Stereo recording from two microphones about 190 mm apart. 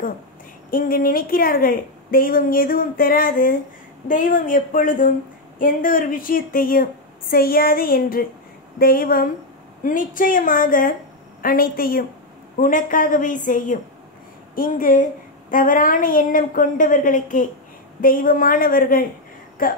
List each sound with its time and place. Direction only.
0.7 s a woman's voice: 50° left (ahead or behind)